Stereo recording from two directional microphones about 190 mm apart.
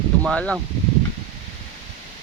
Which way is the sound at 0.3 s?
5° left (ahead or behind).